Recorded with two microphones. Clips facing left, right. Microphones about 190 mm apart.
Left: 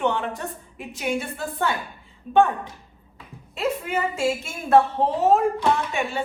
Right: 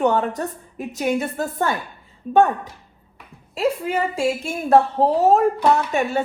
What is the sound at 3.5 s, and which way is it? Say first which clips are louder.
A woman's voice: right 4 dB; 35° right (ahead or behind).